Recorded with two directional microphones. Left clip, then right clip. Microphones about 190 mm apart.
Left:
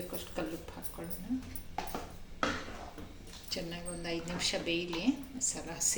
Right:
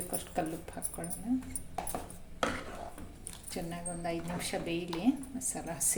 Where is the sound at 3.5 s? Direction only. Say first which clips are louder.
Even; 50° right (ahead or behind).